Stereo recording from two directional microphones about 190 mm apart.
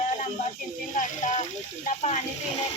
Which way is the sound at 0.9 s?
40° left (ahead or behind).